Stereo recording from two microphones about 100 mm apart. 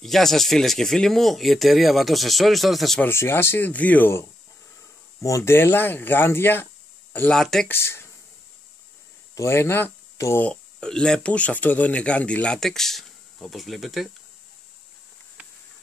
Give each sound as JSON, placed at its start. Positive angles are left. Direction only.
{"t": 0.0, "sound": "speech", "side_deg": 5}
{"t": 3.0, "sound": "speech", "side_deg": 25}
{"t": 5.2, "sound": "speech", "side_deg": 30}
{"t": 7.2, "sound": "speech", "side_deg": 5}
{"t": 7.6, "sound": "speech", "side_deg": 25}
{"t": 9.3, "sound": "speech", "side_deg": 30}
{"t": 10.4, "sound": "speech", "side_deg": 10}